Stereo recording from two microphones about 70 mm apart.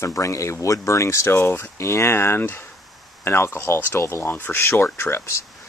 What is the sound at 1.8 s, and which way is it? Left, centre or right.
Speech, left.